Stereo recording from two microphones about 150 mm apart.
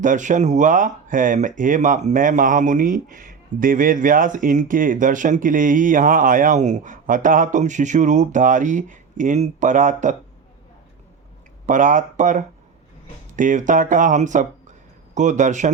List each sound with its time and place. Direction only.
0.0 s speech: 55° right (ahead or behind)
11.6 s a man's voice: 60° right (ahead or behind)